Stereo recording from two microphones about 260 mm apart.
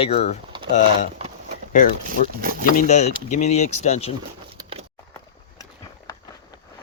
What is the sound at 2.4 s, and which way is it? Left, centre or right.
Speech, right.